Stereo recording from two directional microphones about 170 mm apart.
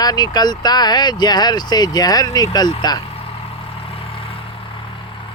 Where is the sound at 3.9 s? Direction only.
35° left (ahead or behind).